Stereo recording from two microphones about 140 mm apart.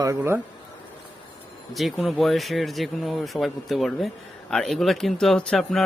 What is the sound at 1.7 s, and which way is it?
Speech, centre (ahead or behind).